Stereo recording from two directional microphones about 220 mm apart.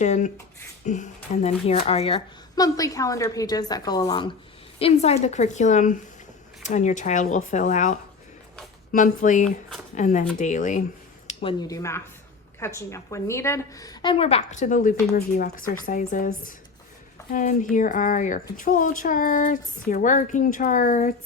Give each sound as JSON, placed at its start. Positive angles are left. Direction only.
{"t": 0.0, "sound": "a woman's voice", "side_deg": 30}
{"t": 2.6, "sound": "a woman's voice", "side_deg": 15}
{"t": 4.8, "sound": "a woman's voice", "side_deg": 30}
{"t": 11.3, "sound": "a sound", "side_deg": 30}
{"t": 11.7, "sound": "a woman's voice", "side_deg": 15}